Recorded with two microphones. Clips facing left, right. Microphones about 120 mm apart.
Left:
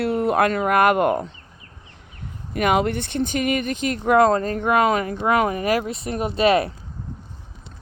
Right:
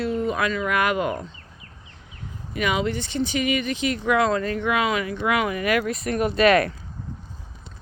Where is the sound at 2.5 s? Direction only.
50° left (ahead or behind); by 6.7 s 30° left (ahead or behind).